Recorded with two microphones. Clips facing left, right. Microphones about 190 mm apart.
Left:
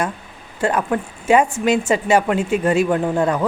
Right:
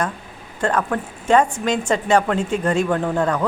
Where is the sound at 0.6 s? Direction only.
10° left (ahead or behind).